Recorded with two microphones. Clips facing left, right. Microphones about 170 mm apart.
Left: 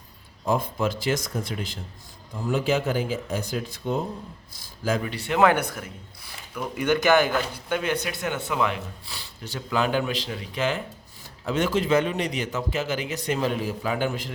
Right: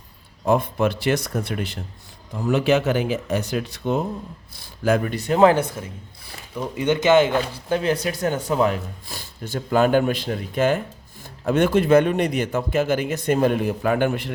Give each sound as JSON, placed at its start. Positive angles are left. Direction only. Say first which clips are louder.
{"t": 0.4, "sound": "speech", "louder": "right 5 dB", "side_deg": -65}